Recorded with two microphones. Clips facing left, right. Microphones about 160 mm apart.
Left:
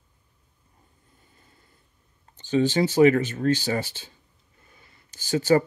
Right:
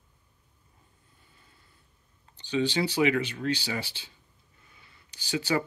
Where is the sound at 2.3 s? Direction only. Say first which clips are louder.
Left 6 dB; 45° left (ahead or behind).